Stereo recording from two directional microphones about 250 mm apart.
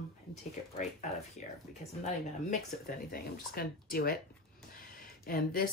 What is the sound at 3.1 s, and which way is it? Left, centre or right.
Speech, left.